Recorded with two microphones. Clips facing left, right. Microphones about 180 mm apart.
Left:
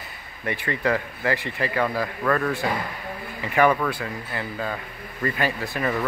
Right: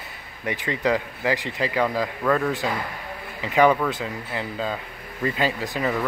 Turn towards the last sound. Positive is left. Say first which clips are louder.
# right 1 dB
turn(degrees=-15)  # may be behind; listen again after turning